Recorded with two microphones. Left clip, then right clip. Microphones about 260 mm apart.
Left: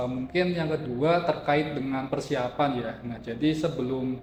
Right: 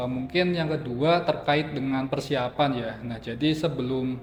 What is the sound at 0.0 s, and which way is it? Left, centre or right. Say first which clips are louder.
A man's voice: right 1 dB; right.